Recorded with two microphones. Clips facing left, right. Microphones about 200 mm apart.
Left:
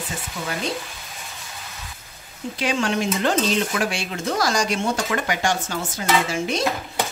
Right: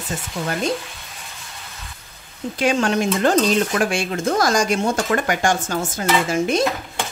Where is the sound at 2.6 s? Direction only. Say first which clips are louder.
Right 4 dB; 45° right (ahead or behind).